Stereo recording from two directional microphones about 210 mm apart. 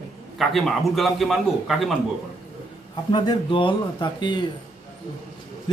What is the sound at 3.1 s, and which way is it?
Speech, 20° left (ahead or behind).